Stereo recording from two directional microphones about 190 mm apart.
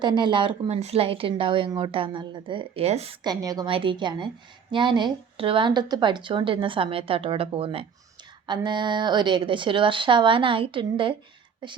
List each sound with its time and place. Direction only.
0.0 s a woman's voice: 25° right (ahead or behind)
3.2 s a woman's voice: 20° right (ahead or behind)